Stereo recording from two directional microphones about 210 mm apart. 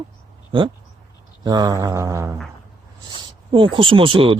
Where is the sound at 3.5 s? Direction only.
25° right (ahead or behind).